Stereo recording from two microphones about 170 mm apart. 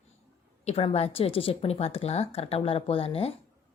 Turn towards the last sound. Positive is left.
turn(degrees=35)  # may be behind; listen again after turning